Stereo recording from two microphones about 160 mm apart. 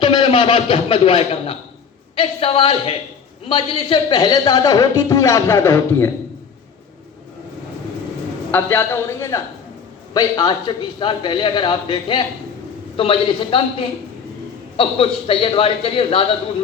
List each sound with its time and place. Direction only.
0.0 s a man's voice: 35° left (ahead or behind); by 6.1 s 15° left (ahead or behind)
8.5 s a man's voice: 15° left (ahead or behind); by 16.2 s 35° left (ahead or behind)